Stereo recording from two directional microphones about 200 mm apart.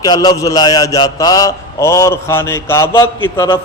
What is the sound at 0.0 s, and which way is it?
A man's voice, 20° left (ahead or behind).